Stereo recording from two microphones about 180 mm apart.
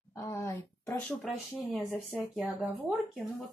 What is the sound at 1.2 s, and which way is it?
Speech, centre (ahead or behind).